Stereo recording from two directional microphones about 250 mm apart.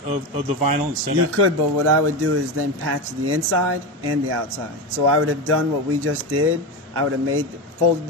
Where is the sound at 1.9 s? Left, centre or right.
Right.